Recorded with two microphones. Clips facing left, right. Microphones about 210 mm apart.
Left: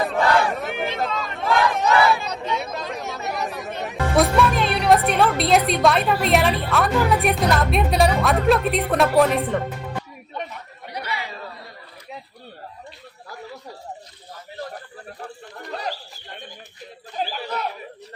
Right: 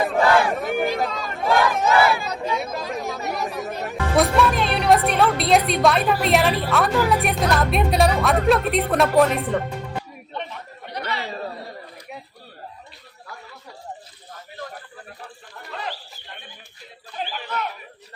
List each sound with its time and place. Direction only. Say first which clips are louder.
0.0 s crowd: right 2 dB; centre (ahead or behind)
2.2 s speech: right 1 dB; centre (ahead or behind)
10.3 s chatter: even; 10° left (ahead or behind)
11.3 s chatter: right 6 dB; 40° right (ahead or behind)
15.7 s a sound: left 2 dB; 40° left (ahead or behind)
17.2 s a sound: left 2 dB; 40° left (ahead or behind)